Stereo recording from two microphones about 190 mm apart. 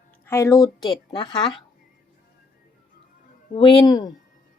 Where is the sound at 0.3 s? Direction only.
15° left (ahead or behind).